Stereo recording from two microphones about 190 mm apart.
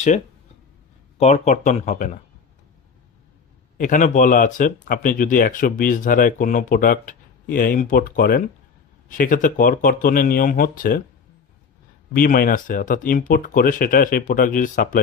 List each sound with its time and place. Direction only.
1.1 s speech: 35° left (ahead or behind)
3.7 s speech: 45° left (ahead or behind)
12.1 s speech: 50° left (ahead or behind)